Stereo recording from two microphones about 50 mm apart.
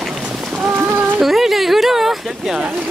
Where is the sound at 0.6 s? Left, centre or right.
Right.